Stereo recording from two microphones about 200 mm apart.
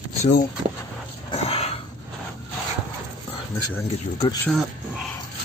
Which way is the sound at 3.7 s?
15° left (ahead or behind).